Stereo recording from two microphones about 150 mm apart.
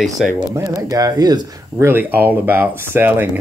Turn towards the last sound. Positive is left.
turn(degrees=-10)  # may be behind; listen again after turning